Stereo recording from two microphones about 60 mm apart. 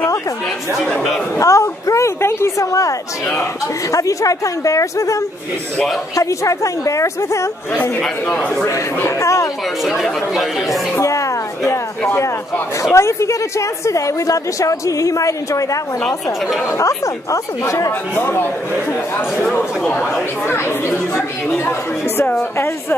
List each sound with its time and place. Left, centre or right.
1.4 s a woman's voice: left
9.2 s a woman's voice: left
9.8 s speech: centre
11.0 s a woman's voice: left
12.1 s speech: left
12.9 s a woman's voice: left
18.1 s speech: left
20.4 s speech: left
21.6 s speech: left